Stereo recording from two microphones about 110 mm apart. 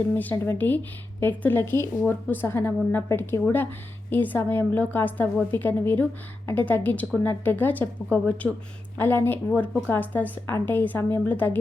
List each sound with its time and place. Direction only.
0.1 s speech: 15° left (ahead or behind)